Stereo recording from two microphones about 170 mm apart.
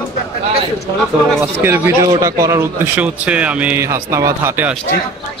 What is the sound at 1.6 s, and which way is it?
Speech, 15° right (ahead or behind).